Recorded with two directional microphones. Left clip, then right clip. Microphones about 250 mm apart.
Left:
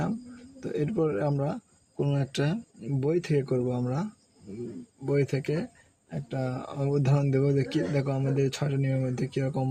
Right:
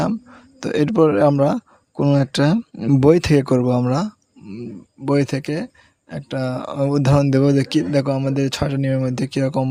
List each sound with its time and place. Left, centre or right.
0.6 s speech: right